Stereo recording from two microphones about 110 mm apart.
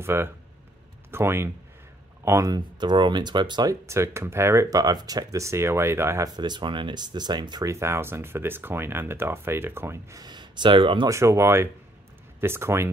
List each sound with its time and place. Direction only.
0.0 s speech: 20° right (ahead or behind)
2.5 s speech: 45° right (ahead or behind)
3.8 s speech: 25° right (ahead or behind)
6.3 s speech: 40° right (ahead or behind)
7.6 s speech: 25° right (ahead or behind)
10.2 s speech: 45° right (ahead or behind)
11.1 s speech: 25° right (ahead or behind)